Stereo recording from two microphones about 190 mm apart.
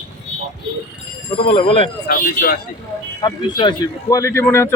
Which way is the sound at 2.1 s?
45° left (ahead or behind).